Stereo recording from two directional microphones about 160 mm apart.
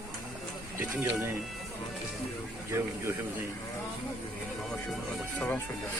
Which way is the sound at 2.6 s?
15° right (ahead or behind).